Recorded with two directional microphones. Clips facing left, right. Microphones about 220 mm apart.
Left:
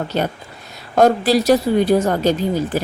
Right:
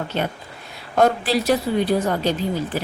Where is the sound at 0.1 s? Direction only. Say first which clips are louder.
Left 4 dB; 40° left (ahead or behind).